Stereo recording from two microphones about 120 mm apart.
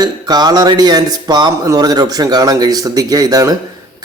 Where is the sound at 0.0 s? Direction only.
35° right (ahead or behind).